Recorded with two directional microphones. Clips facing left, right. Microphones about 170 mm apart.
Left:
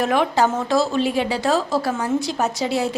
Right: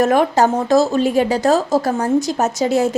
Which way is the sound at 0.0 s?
45° right (ahead or behind).